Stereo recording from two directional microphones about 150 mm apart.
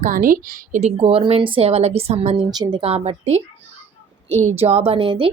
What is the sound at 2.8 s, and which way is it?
A woman's voice, 40° right (ahead or behind).